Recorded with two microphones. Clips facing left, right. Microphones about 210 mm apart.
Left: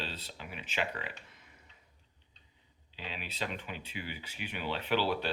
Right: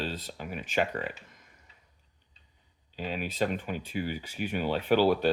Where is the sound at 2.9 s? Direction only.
45° right (ahead or behind).